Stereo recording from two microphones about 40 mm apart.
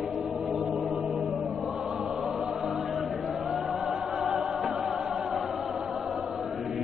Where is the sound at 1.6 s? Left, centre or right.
Centre.